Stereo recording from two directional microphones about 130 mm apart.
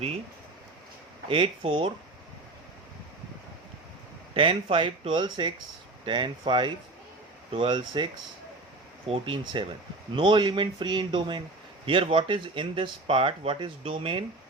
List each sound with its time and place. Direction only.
1.3 s speech: 40° right (ahead or behind)
4.4 s speech: 40° right (ahead or behind)
9.0 s speech: 45° right (ahead or behind)